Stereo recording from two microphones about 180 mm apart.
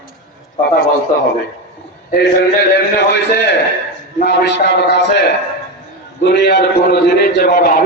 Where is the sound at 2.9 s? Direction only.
70° left (ahead or behind).